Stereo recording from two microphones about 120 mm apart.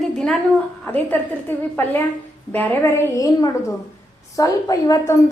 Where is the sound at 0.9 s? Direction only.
15° left (ahead or behind).